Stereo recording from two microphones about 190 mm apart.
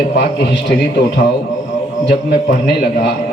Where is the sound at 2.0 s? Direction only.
60° left (ahead or behind).